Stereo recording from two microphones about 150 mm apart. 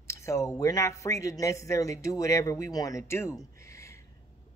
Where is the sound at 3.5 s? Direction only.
20° left (ahead or behind).